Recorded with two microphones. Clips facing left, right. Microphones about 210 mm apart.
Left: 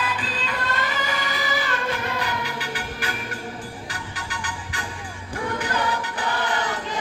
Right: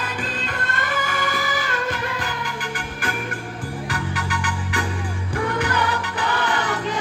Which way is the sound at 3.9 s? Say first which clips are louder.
Right 8 dB; 65° right (ahead or behind).